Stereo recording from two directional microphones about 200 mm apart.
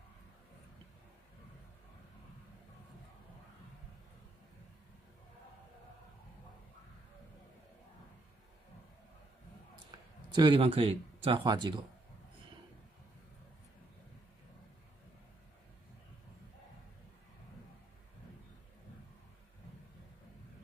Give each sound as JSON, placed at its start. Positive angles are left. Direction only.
{"t": 9.8, "sound": "speech", "side_deg": -20}